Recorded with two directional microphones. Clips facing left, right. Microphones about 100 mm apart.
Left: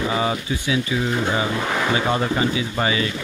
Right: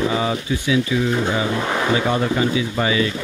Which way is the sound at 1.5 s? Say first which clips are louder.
Right 2 dB; 10° right (ahead or behind).